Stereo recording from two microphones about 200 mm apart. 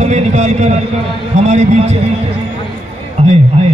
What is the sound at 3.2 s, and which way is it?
Speech, 30° right (ahead or behind).